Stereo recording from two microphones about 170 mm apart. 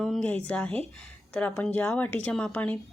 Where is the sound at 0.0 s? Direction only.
Centre (ahead or behind).